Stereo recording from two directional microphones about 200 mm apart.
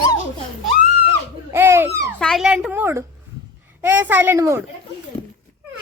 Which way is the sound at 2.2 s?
Centre (ahead or behind).